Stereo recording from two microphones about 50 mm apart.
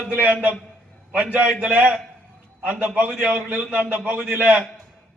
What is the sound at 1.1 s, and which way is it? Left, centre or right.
A man's voice, right.